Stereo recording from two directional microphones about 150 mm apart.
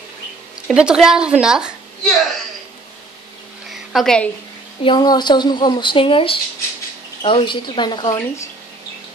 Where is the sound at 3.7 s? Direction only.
Centre (ahead or behind).